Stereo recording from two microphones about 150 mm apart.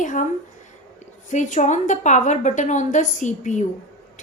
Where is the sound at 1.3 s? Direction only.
55° left (ahead or behind).